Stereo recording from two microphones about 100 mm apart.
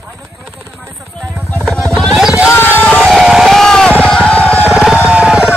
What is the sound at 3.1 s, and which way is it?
Music, 5° right (ahead or behind).